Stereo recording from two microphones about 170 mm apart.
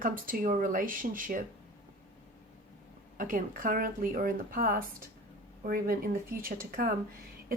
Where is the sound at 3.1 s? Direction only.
50° right (ahead or behind).